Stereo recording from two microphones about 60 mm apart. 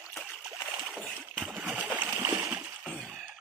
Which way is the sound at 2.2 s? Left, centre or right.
Right.